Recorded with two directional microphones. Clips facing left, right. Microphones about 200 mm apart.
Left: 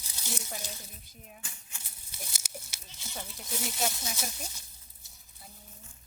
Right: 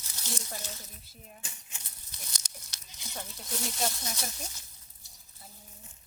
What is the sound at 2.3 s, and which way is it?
Speech, 5° left (ahead or behind).